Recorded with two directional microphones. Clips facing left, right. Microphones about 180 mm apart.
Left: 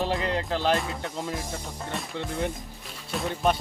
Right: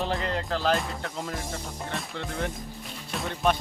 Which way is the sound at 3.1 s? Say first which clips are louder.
Left 1 dB; centre (ahead or behind).